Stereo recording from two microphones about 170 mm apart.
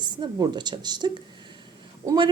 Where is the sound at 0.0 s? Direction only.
25° right (ahead or behind).